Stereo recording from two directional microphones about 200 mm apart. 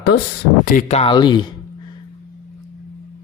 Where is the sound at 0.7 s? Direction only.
30° left (ahead or behind).